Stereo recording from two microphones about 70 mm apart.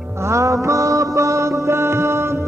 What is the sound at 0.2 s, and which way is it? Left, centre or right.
Music, right.